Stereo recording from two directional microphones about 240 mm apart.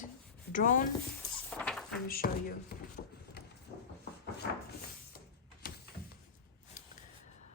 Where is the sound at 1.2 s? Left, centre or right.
Centre.